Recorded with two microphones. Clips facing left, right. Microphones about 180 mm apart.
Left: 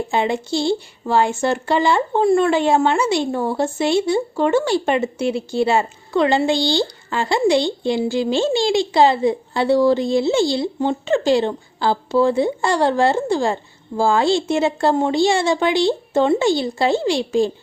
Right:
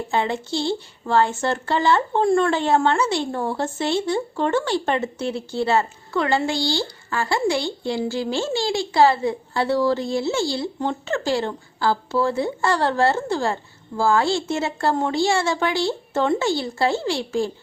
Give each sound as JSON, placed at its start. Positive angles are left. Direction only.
{"t": 0.1, "sound": "speech", "side_deg": 15}